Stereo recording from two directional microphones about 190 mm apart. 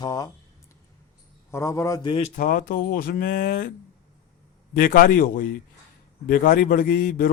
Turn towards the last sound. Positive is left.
turn(degrees=50)  # may be behind; listen again after turning